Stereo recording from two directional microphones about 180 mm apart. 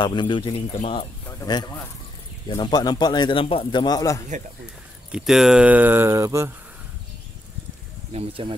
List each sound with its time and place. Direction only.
0.0 s a man's voice: 25° left (ahead or behind)
5.1 s speech: centre (ahead or behind)
8.1 s speech: 30° right (ahead or behind)